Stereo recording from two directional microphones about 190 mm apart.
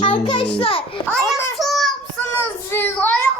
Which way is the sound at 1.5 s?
Centre (ahead or behind).